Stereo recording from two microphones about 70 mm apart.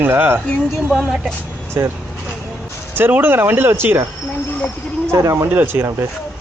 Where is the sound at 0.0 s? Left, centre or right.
Right.